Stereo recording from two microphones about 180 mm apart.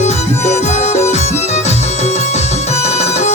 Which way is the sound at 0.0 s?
40° left (ahead or behind).